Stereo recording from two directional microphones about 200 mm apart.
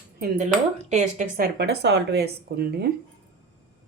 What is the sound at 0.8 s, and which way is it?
Speech, 35° right (ahead or behind).